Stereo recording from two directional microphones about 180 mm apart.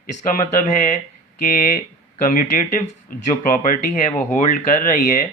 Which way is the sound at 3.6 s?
50° left (ahead or behind).